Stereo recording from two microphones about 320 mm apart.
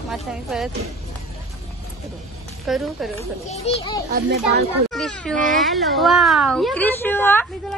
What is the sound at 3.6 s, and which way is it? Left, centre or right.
Speech, centre.